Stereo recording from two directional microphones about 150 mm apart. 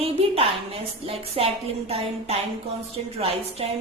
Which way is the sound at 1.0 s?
40° right (ahead or behind).